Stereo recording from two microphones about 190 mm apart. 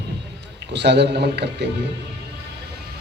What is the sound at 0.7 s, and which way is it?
A man's voice, 60° right (ahead or behind).